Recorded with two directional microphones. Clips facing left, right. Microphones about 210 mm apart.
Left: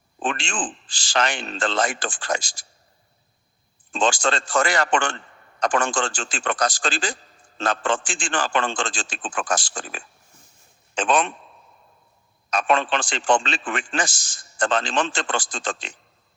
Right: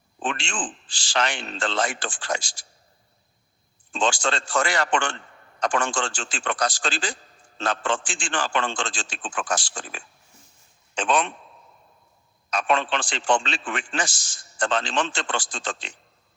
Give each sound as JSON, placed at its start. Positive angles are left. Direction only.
{"t": 0.2, "sound": "a man's voice", "side_deg": 50}
{"t": 3.9, "sound": "a man's voice", "side_deg": 50}
{"t": 12.5, "sound": "a man's voice", "side_deg": 50}